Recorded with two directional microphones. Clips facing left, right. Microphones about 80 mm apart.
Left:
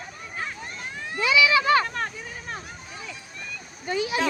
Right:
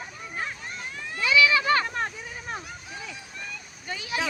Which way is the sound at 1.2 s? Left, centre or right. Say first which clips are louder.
Left 1 dB; centre.